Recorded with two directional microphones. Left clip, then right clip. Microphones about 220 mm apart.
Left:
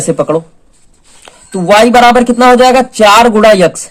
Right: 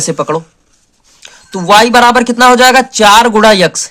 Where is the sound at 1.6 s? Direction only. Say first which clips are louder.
Left 1 dB; 30° right (ahead or behind).